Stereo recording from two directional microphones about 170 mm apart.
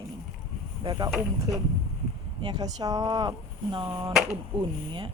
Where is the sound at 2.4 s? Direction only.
25° right (ahead or behind).